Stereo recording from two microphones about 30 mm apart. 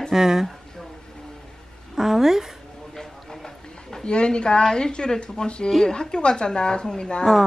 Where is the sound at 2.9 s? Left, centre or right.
Centre.